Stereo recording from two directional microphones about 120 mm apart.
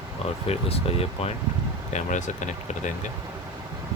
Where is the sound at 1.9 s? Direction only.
90° left.